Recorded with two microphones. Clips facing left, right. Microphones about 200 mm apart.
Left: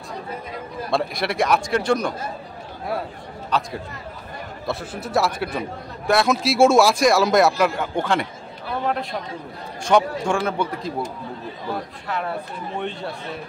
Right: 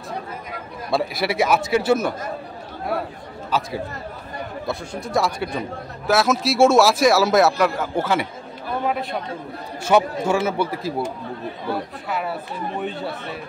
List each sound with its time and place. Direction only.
0.9 s speech: 5° right (ahead or behind)
3.4 s speech: 5° right (ahead or behind)
9.8 s speech: 5° right (ahead or behind)
12.1 s speech: 5° right (ahead or behind)